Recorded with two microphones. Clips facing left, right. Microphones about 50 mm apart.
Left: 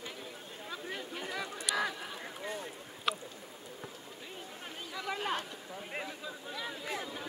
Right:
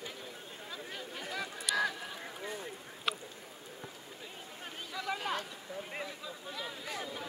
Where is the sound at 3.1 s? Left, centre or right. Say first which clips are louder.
Left 2 dB; centre.